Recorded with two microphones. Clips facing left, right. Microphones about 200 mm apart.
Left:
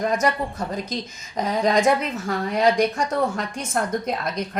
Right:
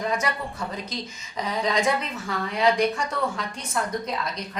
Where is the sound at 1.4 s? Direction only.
45° left (ahead or behind).